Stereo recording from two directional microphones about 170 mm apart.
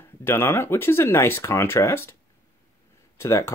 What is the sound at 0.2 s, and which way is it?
Speech, 15° left (ahead or behind).